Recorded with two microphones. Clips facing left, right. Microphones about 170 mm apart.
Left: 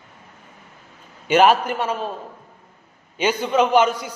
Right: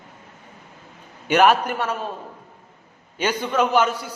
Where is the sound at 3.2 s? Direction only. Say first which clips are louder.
Left 3 dB; 10° left (ahead or behind).